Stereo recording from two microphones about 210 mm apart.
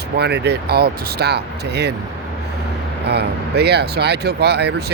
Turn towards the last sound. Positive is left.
turn(degrees=-50)  # may be behind; listen again after turning